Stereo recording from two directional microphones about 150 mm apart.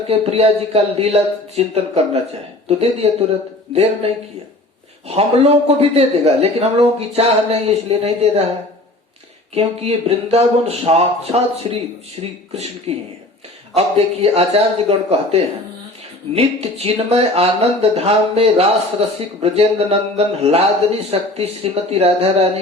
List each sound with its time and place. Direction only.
0.1 s speech: 45° right (ahead or behind)
9.6 s speech: 45° right (ahead or behind)